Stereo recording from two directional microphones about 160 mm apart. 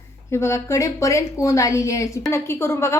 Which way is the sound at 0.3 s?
15° left (ahead or behind).